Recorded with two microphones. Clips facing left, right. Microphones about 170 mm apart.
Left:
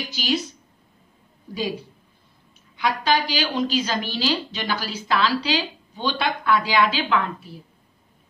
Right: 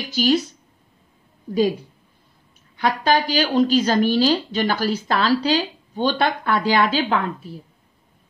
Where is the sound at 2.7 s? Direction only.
45° right (ahead or behind).